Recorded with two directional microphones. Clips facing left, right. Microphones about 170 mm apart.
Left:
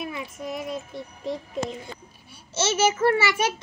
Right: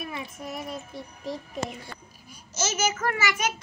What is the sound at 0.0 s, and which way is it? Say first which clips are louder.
Child singing: left 3 dB; 25° left (ahead or behind).